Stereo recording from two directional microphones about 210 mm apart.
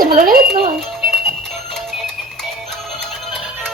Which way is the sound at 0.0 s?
45° right (ahead or behind).